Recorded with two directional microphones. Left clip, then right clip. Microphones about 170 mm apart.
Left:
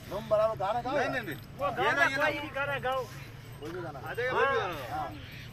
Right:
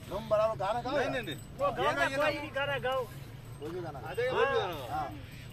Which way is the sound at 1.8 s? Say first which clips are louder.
Left 5 dB; 65° right (ahead or behind).